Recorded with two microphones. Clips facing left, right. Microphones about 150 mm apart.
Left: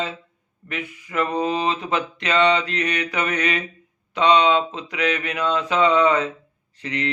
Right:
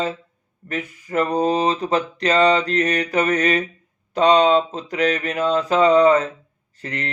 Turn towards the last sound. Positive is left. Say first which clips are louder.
# left 2 dB
turn(degrees=-45)  # may be behind; listen again after turning